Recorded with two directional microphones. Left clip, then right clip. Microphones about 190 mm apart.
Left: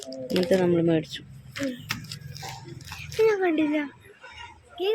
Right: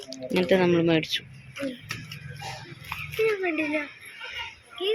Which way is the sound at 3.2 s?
55° left (ahead or behind).